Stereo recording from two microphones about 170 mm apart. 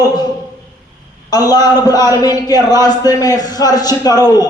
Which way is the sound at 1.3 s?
25° left (ahead or behind).